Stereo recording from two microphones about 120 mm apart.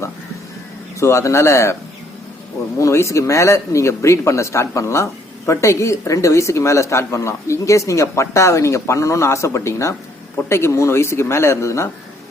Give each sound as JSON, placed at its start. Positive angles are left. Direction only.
{"t": 0.9, "sound": "speech", "side_deg": 25}
{"t": 2.7, "sound": "speech", "side_deg": 25}